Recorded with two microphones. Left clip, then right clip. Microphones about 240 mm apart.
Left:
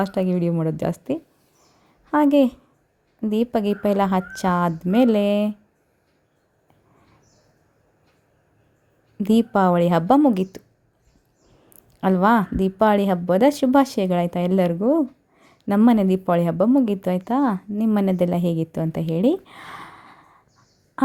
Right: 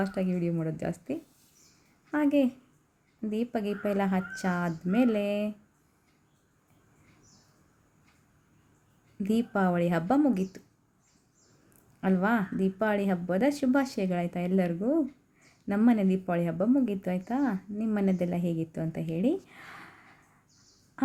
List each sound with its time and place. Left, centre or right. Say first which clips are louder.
0.0 s speech: left 9 dB; left
9.1 s speech: left 10 dB; left
11.9 s speech: left 10 dB; left